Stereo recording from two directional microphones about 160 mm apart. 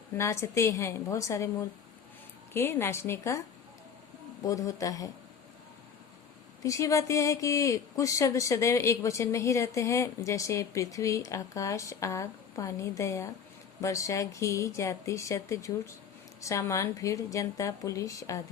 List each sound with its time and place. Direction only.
0.2 s a woman's voice: 15° left (ahead or behind)
2.5 s a woman's voice: 15° left (ahead or behind)
4.4 s speech: 20° left (ahead or behind)
6.6 s speech: 20° left (ahead or behind)